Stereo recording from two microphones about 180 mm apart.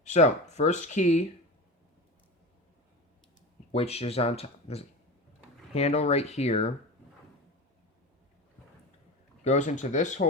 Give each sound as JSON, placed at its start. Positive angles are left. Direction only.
{"t": 0.0, "sound": "speech", "side_deg": 40}
{"t": 3.7, "sound": "speech", "side_deg": 35}
{"t": 9.4, "sound": "speech", "side_deg": 40}